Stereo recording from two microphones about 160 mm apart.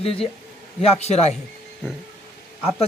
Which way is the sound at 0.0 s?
35° left (ahead or behind).